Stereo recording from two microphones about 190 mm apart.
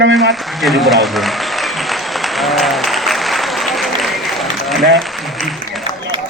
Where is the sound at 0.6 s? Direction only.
Centre (ahead or behind).